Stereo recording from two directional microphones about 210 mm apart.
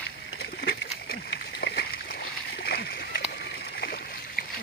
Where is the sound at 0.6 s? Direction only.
50° left (ahead or behind).